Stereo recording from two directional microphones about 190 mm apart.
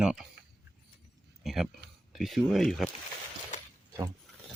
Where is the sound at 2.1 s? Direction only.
Centre (ahead or behind).